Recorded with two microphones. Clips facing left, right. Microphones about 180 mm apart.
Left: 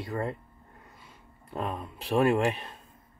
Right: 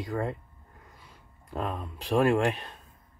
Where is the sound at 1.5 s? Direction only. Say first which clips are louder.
Even; centre (ahead or behind).